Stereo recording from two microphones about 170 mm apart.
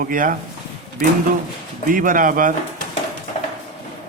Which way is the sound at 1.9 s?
55° right (ahead or behind).